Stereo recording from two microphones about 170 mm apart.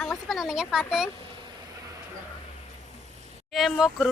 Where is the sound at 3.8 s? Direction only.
5° right (ahead or behind).